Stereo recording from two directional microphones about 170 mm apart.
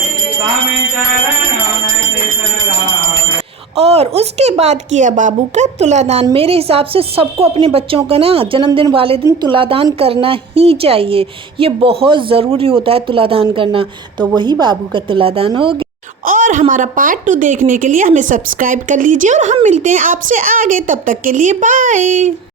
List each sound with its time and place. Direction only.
3.8 s a woman's voice: 40° right (ahead or behind)
16.2 s a woman's voice: 55° right (ahead or behind)